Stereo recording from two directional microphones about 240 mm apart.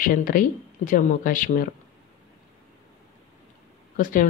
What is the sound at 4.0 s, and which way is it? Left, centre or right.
Speech, left.